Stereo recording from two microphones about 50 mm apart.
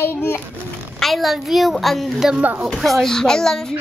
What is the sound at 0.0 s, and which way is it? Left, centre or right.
Speech, left.